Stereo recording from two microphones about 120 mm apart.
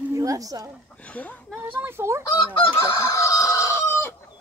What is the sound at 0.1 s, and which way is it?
Speech, 30° right (ahead or behind).